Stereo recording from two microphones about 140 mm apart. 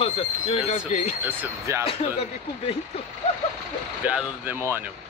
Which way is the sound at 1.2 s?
15° right (ahead or behind).